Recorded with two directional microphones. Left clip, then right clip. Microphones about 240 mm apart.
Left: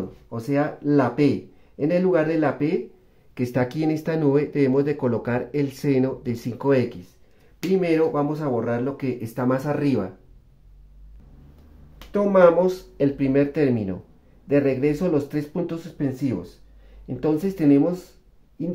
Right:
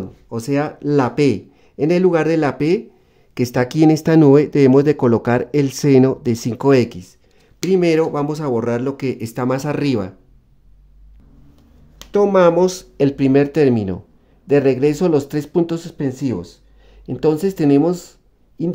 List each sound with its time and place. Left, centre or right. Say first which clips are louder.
0.3 s speech: right 4 dB; right
12.0 s speech: right 3 dB; right